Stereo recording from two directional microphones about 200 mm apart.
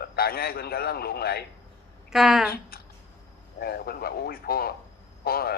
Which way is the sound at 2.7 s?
50° left (ahead or behind).